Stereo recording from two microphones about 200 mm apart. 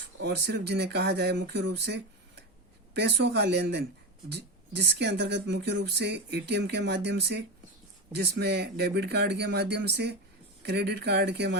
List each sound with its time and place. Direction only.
0.2 s speech: 55° right (ahead or behind)